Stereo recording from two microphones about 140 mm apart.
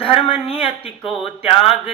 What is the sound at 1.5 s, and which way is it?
Speech, 45° left (ahead or behind).